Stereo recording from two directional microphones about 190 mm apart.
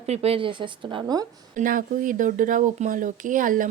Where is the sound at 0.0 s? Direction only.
35° right (ahead or behind).